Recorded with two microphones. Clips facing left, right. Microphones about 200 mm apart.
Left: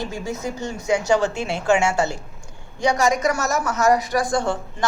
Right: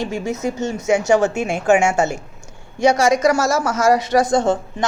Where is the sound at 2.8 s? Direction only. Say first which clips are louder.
Right 5 dB; 80° right.